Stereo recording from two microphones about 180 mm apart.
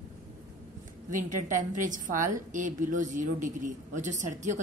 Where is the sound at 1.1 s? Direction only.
45° right (ahead or behind).